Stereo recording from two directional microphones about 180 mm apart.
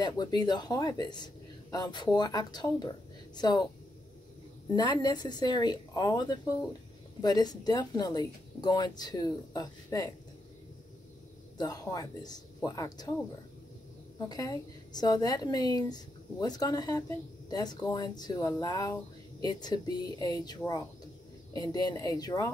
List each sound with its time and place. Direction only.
0.0 s speech: 25° left (ahead or behind)
4.7 s speech: 20° left (ahead or behind)
11.5 s speech: 20° left (ahead or behind)
14.3 s speech: 20° left (ahead or behind)